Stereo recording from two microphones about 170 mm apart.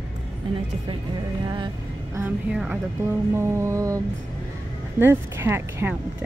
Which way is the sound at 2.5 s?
10° right (ahead or behind).